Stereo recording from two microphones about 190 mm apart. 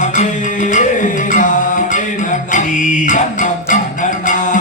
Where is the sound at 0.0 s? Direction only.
40° left (ahead or behind).